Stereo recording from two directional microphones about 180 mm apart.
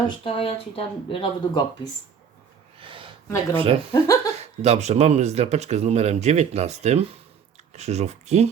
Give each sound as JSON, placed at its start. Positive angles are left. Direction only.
{"t": 0.3, "sound": "speech", "side_deg": 30}
{"t": 2.8, "sound": "a sound", "side_deg": -30}
{"t": 3.5, "sound": "speech", "side_deg": -30}
{"t": 3.9, "sound": "speech", "side_deg": 20}
{"t": 4.4, "sound": "speech", "side_deg": -40}